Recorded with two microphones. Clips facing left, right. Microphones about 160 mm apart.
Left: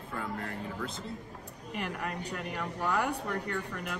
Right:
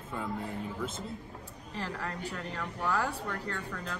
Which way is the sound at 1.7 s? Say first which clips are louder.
Left 2 dB; 20° left (ahead or behind).